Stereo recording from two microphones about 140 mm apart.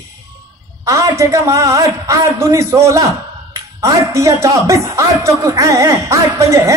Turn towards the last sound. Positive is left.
turn(degrees=-20)  # may be behind; listen again after turning